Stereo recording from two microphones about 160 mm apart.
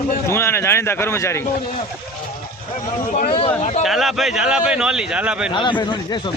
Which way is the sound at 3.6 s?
45° left (ahead or behind).